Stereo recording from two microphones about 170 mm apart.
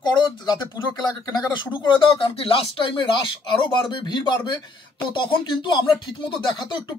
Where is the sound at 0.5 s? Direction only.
25° left (ahead or behind).